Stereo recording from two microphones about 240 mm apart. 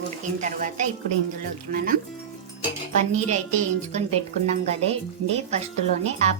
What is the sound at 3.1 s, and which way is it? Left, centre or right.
A woman's voice, right.